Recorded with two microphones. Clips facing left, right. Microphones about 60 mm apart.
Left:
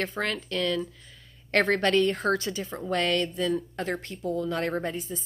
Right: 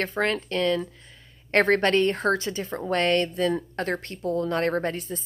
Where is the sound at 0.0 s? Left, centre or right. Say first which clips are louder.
Right 4 dB; right.